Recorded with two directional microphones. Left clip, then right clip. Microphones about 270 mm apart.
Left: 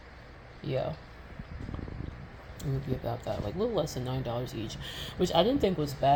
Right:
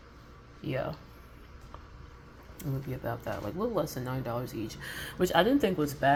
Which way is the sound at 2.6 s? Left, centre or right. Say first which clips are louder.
Left 2 dB; right.